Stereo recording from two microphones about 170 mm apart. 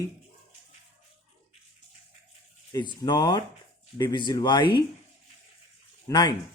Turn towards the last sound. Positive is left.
turn(degrees=25)  # may be behind; listen again after turning